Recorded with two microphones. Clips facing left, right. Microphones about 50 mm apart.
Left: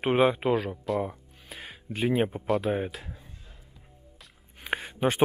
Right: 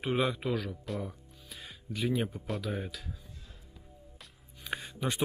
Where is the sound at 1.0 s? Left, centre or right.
Left.